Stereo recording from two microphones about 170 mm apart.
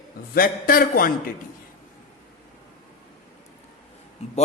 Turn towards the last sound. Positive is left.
turn(degrees=35)  # may be behind; listen again after turning